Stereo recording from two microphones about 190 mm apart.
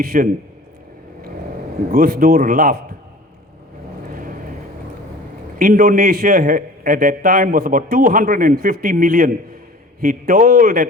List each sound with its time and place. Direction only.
0.0 s a man's voice: 50° right (ahead or behind)
1.9 s a man's voice: 50° right (ahead or behind)
5.5 s a man's voice: 45° right (ahead or behind)